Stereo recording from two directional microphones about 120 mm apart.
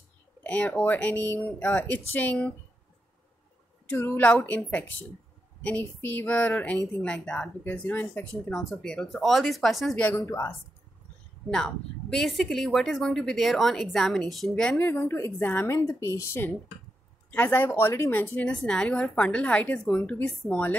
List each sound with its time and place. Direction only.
0.4 s a woman's voice: 10° left (ahead or behind)
3.9 s a woman's voice: 15° left (ahead or behind)
10.0 s speech: 20° left (ahead or behind)
11.5 s a woman's voice: 5° left (ahead or behind)
14.9 s a woman's voice: 20° left (ahead or behind)